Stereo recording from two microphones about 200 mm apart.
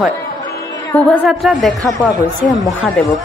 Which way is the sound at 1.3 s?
Centre (ahead or behind).